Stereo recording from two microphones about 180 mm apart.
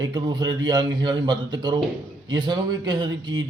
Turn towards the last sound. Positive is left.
turn(degrees=-25)  # may be behind; listen again after turning